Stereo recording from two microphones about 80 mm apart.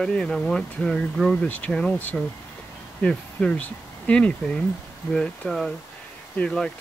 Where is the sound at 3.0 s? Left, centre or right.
Centre.